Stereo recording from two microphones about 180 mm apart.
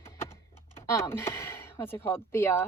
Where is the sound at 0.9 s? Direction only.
15° left (ahead or behind).